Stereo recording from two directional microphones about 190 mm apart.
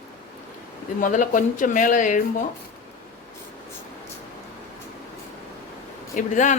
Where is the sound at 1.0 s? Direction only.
45° left (ahead or behind).